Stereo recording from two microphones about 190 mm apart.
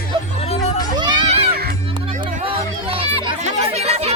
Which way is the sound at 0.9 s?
25° right (ahead or behind).